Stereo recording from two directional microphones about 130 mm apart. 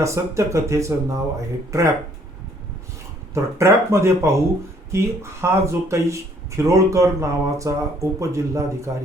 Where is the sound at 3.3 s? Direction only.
20° right (ahead or behind).